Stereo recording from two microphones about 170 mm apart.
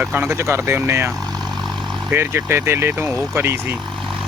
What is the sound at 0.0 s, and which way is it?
Speech, 10° right (ahead or behind).